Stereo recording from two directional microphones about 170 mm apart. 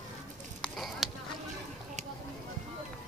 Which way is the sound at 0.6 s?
Centre (ahead or behind).